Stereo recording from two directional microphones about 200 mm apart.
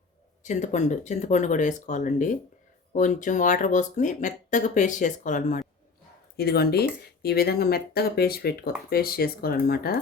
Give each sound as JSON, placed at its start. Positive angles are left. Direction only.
{"t": 0.4, "sound": "speech", "side_deg": 40}
{"t": 6.3, "sound": "speech", "side_deg": 50}